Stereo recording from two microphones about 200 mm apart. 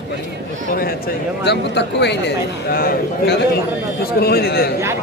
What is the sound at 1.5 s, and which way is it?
A man's voice, 60° left (ahead or behind).